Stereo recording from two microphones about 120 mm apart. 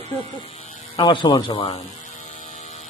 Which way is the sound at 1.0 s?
40° left (ahead or behind).